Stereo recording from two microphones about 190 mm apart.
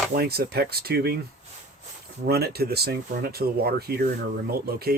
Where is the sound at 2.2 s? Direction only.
55° right (ahead or behind).